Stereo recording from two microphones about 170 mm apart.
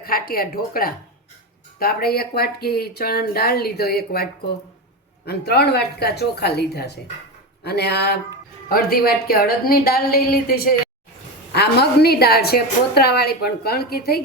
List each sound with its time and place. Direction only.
0.0 s a woman's voice: 60° left (ahead or behind)
8.7 s speech: 60° left (ahead or behind)
11.5 s a woman's voice: 70° left (ahead or behind)